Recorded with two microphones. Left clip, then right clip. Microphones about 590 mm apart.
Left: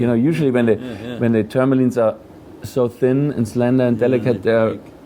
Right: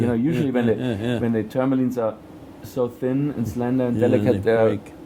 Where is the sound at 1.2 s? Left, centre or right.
Centre.